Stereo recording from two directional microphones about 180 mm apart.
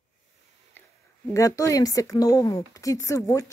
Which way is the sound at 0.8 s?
10° left (ahead or behind).